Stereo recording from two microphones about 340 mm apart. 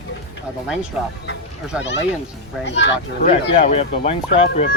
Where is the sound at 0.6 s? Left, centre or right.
Centre.